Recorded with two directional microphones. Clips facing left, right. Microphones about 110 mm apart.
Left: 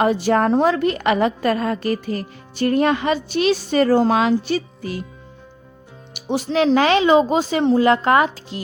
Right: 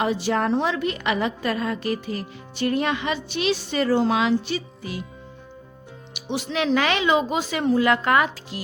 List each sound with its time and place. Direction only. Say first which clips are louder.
0.0 s a woman's voice: left 6 dB; 50° left (ahead or behind)
6.1 s speech: left 7 dB; 40° left (ahead or behind)